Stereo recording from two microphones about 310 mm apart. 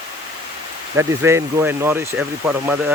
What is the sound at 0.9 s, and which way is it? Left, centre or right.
Speech, centre.